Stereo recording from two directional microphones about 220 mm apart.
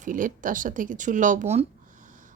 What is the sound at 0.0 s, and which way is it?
Speech, 35° right (ahead or behind).